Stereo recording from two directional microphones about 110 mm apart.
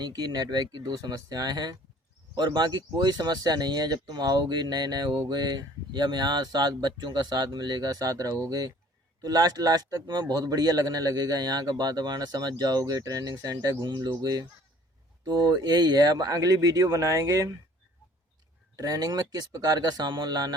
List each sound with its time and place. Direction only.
0.0 s speech: 40° right (ahead or behind)
18.8 s speech: 35° right (ahead or behind)